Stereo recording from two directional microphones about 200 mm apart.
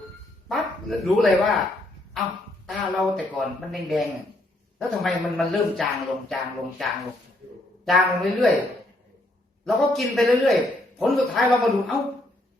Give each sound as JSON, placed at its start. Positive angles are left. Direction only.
{"t": 0.4, "sound": "speech", "side_deg": 0}
{"t": 2.6, "sound": "a man's voice", "side_deg": 0}
{"t": 7.9, "sound": "a man's voice", "side_deg": 0}
{"t": 9.6, "sound": "a man's voice", "side_deg": 0}